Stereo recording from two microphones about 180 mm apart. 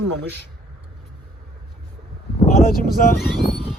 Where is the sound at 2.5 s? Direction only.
55° left (ahead or behind).